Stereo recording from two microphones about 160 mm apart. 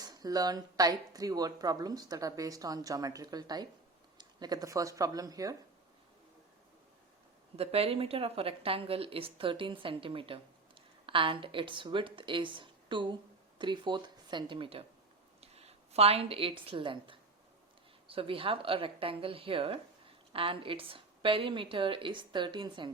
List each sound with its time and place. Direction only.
0.0 s speech: 25° right (ahead or behind)
7.5 s a woman's voice: 40° right (ahead or behind)